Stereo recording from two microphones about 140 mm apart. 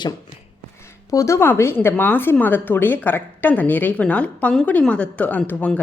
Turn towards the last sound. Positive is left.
turn(degrees=10)  # may be behind; listen again after turning